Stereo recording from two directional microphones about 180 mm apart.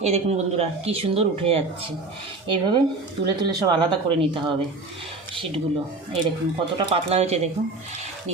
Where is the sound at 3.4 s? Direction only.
25° right (ahead or behind).